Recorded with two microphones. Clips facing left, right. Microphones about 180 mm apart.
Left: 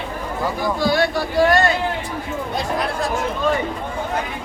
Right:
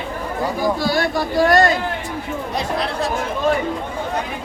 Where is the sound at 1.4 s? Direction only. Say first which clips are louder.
Right 1 dB; 40° right (ahead or behind).